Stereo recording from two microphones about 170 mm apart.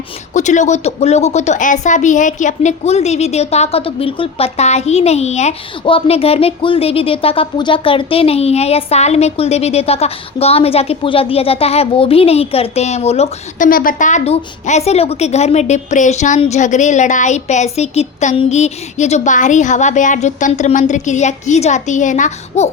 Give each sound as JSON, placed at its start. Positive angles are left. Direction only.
{"t": 0.3, "sound": "a woman's voice", "side_deg": 45}
{"t": 13.7, "sound": "a woman's voice", "side_deg": 55}